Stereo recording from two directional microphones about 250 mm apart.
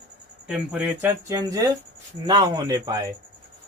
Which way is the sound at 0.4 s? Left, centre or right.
Centre.